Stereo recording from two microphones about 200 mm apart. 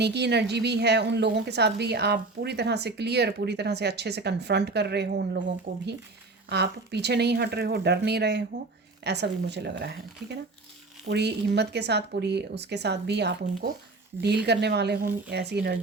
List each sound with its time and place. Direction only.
0.0 s a woman's voice: 55° right (ahead or behind)
5.7 s speech: 45° right (ahead or behind)
6.5 s a woman's voice: 55° right (ahead or behind)